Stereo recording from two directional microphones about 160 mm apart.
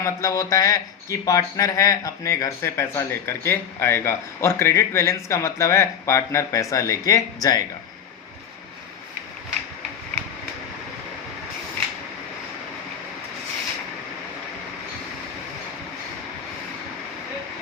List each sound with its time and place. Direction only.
0.0 s speech: 20° left (ahead or behind)